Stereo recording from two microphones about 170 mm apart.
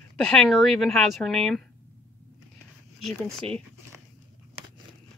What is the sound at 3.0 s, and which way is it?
Speech, centre (ahead or behind).